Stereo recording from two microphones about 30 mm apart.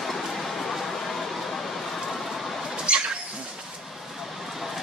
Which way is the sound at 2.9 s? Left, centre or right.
Right.